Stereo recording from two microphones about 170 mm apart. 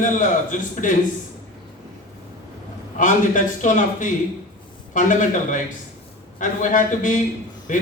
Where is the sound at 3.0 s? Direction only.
50° left (ahead or behind).